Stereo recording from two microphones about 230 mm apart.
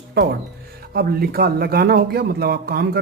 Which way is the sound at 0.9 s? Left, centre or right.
Right.